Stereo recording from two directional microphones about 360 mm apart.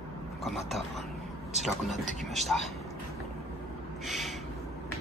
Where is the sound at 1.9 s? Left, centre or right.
Centre.